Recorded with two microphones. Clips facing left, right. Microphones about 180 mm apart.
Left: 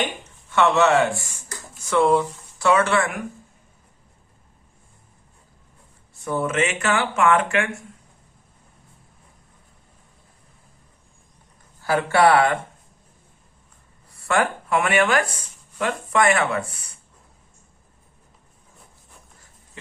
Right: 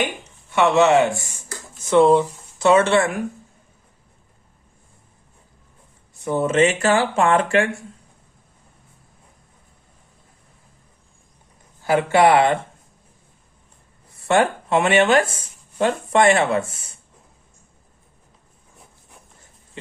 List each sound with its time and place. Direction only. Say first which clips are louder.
0.5 s speech: right 2 dB; 15° right (ahead or behind)
6.1 s speech: right 5 dB; 20° right (ahead or behind)
11.8 s speech: right 2 dB; 20° right (ahead or behind)
14.3 s speech: right 4 dB; 25° right (ahead or behind)